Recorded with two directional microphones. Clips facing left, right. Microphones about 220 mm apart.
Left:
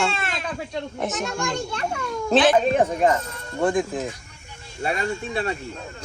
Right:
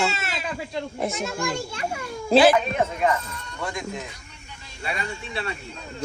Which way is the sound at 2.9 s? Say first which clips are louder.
Left 3 dB; 40° left (ahead or behind).